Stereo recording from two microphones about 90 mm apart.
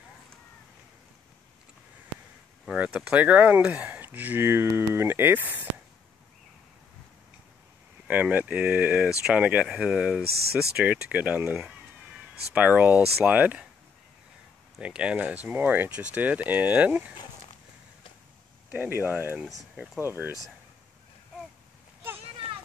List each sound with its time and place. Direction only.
2.6 s speech: 10° right (ahead or behind)
8.1 s speech: 15° right (ahead or behind)
12.5 s speech: 15° right (ahead or behind)
14.8 s speech: 10° right (ahead or behind)
18.7 s speech: 20° right (ahead or behind)